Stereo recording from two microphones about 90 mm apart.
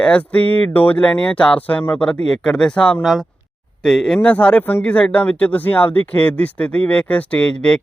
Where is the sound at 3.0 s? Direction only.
5° right (ahead or behind).